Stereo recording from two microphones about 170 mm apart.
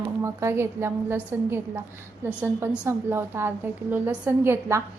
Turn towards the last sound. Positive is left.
turn(degrees=-15)  # may be behind; listen again after turning